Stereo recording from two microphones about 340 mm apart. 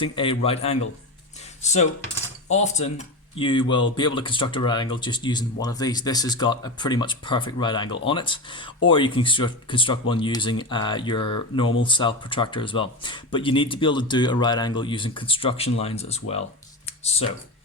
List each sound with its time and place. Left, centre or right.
0.0 s speech: centre
16.8 s computer keyboard: centre